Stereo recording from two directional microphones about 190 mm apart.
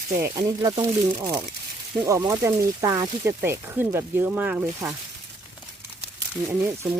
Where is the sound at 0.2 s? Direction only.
20° right (ahead or behind).